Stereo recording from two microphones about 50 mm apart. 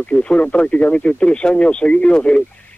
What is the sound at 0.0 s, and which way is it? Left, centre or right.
Speech, left.